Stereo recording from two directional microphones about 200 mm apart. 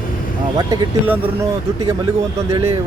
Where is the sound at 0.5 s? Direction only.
20° right (ahead or behind).